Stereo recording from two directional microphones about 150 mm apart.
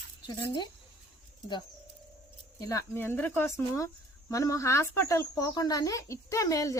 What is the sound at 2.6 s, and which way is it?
A woman's voice, 20° left (ahead or behind).